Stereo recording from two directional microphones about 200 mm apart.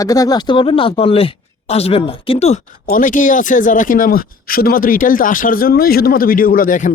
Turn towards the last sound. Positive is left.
turn(degrees=40)  # may be behind; listen again after turning